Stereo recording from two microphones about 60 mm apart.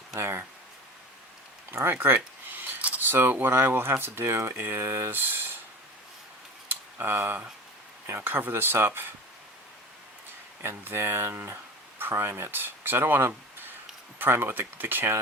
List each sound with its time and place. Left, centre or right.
0.2 s speech: right
1.7 s a sound: right
2.8 s speech: right
6.7 s tick-tock: right
8.0 s speech: right
10.6 s speech: right